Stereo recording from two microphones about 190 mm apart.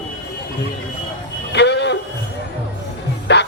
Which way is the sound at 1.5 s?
65° left (ahead or behind).